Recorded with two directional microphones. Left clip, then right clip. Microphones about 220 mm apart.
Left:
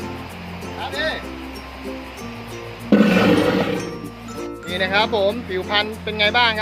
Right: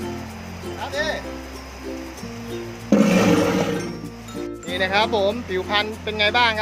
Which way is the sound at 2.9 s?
5° left (ahead or behind).